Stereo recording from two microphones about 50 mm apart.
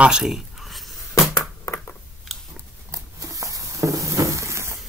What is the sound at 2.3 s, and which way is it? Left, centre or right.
Biting, centre.